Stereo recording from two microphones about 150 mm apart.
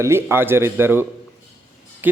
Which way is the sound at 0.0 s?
15° right (ahead or behind).